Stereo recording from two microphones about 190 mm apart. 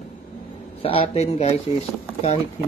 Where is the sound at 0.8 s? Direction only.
30° left (ahead or behind).